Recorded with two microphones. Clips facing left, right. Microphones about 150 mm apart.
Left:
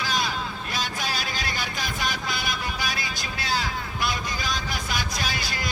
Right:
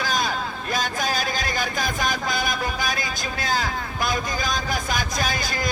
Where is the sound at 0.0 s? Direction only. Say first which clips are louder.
Right 3 dB; 45° right (ahead or behind).